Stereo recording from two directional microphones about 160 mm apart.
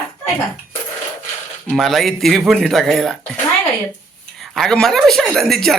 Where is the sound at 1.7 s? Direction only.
Centre (ahead or behind).